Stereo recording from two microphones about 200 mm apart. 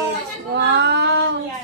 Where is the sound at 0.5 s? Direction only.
60° right (ahead or behind).